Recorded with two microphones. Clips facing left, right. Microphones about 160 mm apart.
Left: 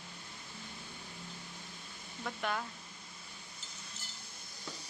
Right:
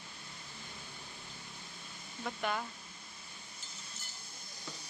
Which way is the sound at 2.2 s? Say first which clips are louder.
Right 1 dB; 5° right (ahead or behind).